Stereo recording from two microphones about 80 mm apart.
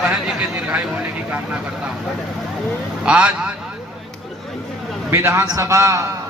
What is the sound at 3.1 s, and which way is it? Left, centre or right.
Speech, centre.